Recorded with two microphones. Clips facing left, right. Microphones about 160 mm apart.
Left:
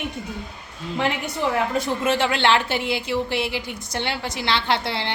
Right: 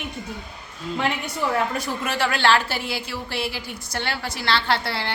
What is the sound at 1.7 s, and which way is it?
A woman's voice, 25° left (ahead or behind).